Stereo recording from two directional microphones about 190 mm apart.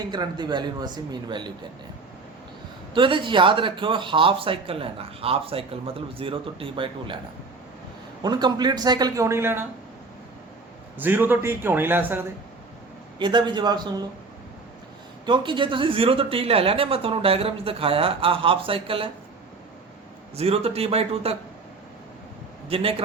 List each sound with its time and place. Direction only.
0.0 s speech: 20° right (ahead or behind)
2.9 s speech: 25° right (ahead or behind)
8.2 s speech: 20° right (ahead or behind)
10.9 s a man's voice: 10° right (ahead or behind)
13.1 s speech: 25° right (ahead or behind)
15.3 s speech: 25° right (ahead or behind)
20.3 s a man's voice: 30° right (ahead or behind)
22.7 s speech: 30° right (ahead or behind)